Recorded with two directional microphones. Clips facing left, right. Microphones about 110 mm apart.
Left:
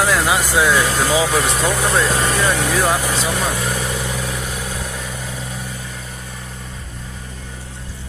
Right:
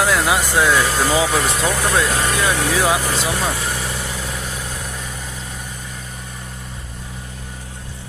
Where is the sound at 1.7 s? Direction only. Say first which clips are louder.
Left 1 dB; 15° left (ahead or behind).